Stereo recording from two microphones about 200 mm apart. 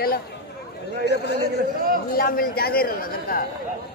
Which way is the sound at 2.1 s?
45° left (ahead or behind).